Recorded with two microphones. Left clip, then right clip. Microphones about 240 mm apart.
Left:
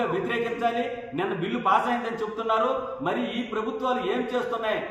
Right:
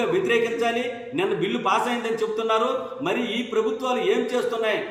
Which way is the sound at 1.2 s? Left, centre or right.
Centre.